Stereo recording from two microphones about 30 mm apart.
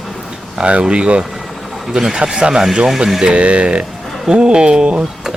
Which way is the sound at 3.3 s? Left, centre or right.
Right.